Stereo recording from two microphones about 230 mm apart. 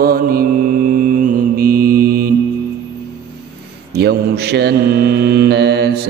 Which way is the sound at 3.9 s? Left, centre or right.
Right.